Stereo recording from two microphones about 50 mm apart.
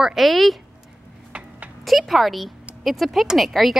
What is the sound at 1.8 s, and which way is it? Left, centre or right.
A woman's voice, centre.